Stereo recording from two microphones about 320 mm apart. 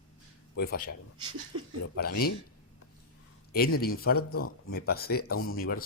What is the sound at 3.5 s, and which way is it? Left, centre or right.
Speech, left.